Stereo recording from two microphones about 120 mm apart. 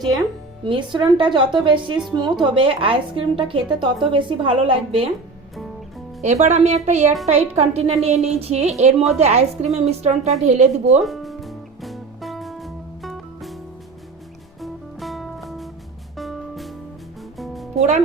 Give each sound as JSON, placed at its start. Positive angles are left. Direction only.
{"t": 0.6, "sound": "a woman's voice", "side_deg": -45}
{"t": 6.2, "sound": "a woman's voice", "side_deg": -70}
{"t": 11.0, "sound": "music", "side_deg": 0}
{"t": 14.6, "sound": "music", "side_deg": 0}
{"t": 17.7, "sound": "speech", "side_deg": -75}